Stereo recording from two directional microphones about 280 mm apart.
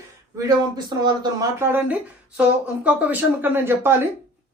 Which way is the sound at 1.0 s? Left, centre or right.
Centre.